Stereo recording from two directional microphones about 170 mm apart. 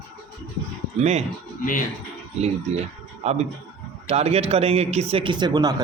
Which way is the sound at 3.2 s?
40° right (ahead or behind).